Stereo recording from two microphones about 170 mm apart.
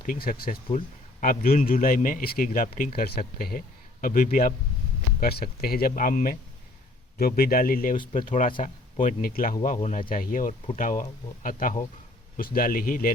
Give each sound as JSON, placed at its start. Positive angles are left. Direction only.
{"t": 0.0, "sound": "a man's voice", "side_deg": 55}
{"t": 5.2, "sound": "a man's voice", "side_deg": 65}